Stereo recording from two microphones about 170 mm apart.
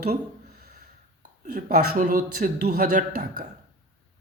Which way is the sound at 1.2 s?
50° right (ahead or behind).